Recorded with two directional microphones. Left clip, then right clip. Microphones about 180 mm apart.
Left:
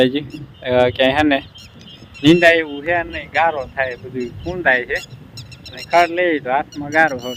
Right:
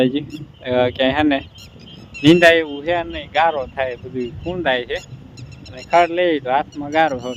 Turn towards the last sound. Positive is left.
turn(degrees=-5)  # may be behind; listen again after turning